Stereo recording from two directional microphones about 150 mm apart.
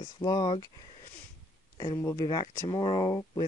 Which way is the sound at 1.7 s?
20° left (ahead or behind).